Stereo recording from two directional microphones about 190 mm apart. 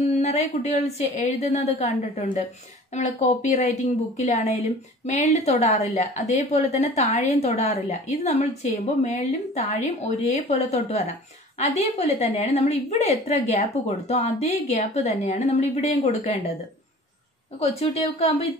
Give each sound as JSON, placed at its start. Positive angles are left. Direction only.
{"t": 0.2, "sound": "a woman's voice", "side_deg": 35}
{"t": 17.6, "sound": "a woman's voice", "side_deg": 35}